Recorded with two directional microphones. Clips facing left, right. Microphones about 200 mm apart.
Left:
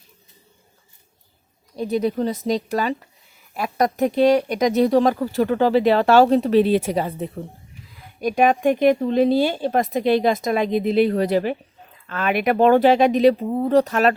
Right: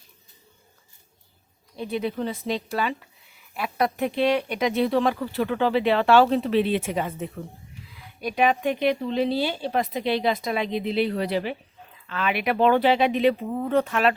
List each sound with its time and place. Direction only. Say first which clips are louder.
1.7 s speech: left 6 dB; 40° left (ahead or behind)
8.2 s speech: left 5 dB; 45° left (ahead or behind)